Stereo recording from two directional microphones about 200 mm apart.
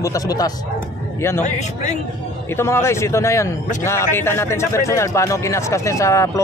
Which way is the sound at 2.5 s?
15° left (ahead or behind).